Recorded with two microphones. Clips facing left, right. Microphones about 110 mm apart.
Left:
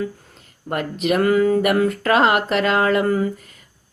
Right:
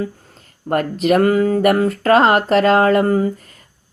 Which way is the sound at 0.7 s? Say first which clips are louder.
Right 5 dB; 40° right (ahead or behind).